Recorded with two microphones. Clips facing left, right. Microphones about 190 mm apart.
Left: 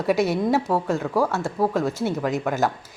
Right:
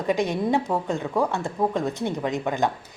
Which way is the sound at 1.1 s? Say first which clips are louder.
Left 1 dB; 15° right (ahead or behind).